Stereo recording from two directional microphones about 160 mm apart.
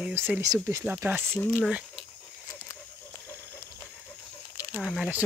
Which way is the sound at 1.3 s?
5° left (ahead or behind).